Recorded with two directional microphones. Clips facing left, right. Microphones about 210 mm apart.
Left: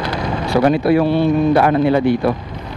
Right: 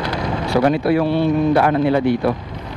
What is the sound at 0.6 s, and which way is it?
A man's voice, 15° left (ahead or behind).